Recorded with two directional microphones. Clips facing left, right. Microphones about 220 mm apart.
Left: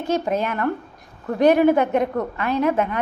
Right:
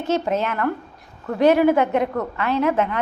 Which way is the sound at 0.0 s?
15° left (ahead or behind).